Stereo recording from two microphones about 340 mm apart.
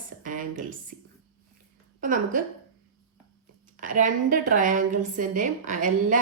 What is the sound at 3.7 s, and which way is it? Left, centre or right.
A woman's voice, right.